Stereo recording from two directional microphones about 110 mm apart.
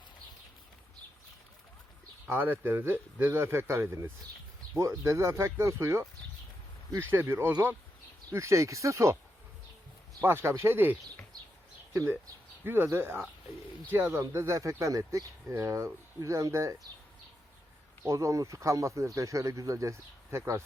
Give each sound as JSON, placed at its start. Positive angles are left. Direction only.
{"t": 2.3, "sound": "speech", "side_deg": -20}
{"t": 7.1, "sound": "speech", "side_deg": -20}
{"t": 10.2, "sound": "speech", "side_deg": -20}
{"t": 12.6, "sound": "speech", "side_deg": -20}
{"t": 18.0, "sound": "speech", "side_deg": -30}